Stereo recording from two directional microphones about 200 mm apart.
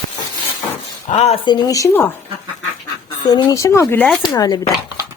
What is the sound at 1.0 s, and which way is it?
Speech, 30° left (ahead or behind).